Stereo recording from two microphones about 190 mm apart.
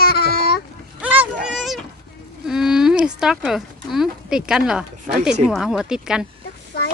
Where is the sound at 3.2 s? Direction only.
5° right (ahead or behind).